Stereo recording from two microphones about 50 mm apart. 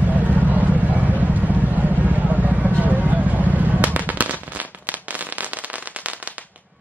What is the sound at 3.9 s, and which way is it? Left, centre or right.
Firecracker, right.